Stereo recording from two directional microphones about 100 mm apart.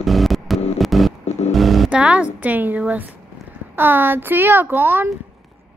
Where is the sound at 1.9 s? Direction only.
10° right (ahead or behind).